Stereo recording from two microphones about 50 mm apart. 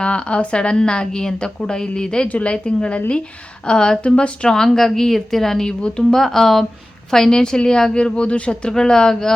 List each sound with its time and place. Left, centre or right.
0.0 s a woman's voice: left
4.4 s a woman's voice: centre